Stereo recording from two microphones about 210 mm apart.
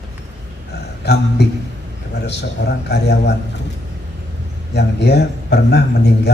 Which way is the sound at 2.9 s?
55° left (ahead or behind).